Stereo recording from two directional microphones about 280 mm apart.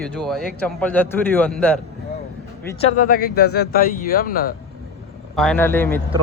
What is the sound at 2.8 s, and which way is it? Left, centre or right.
Speech, left.